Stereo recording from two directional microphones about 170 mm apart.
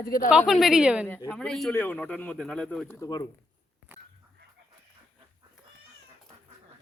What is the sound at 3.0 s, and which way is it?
Speech, 20° left (ahead or behind).